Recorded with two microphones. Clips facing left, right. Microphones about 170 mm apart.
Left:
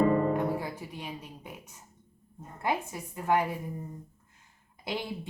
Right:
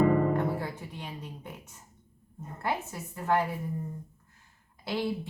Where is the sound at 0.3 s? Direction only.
10° left (ahead or behind).